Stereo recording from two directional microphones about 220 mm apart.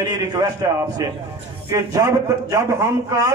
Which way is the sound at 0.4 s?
15° right (ahead or behind).